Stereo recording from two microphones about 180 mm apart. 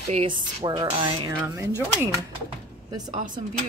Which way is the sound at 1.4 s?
15° right (ahead or behind).